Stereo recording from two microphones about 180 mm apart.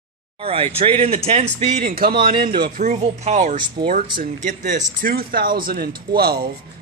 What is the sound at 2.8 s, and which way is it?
Speech, 40° right (ahead or behind).